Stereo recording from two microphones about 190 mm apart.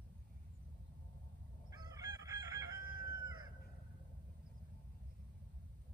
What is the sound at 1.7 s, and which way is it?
Chicken, 20° right (ahead or behind).